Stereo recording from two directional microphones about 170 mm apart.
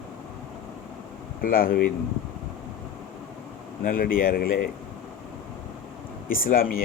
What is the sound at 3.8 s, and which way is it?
Speech, 55° left (ahead or behind).